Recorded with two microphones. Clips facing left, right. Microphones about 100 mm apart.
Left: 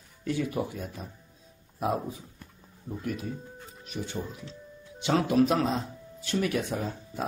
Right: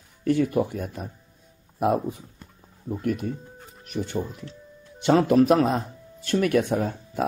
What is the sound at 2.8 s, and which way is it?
Speech, 60° right (ahead or behind).